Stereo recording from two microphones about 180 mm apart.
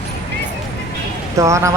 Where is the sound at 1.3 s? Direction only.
15° right (ahead or behind).